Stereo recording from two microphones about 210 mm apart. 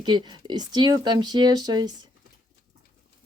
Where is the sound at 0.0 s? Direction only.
20° right (ahead or behind).